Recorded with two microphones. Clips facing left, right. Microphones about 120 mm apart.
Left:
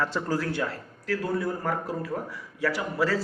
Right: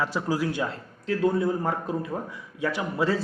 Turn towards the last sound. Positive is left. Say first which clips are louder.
# right 1 dB
turn(degrees=-20)  # may be behind; listen again after turning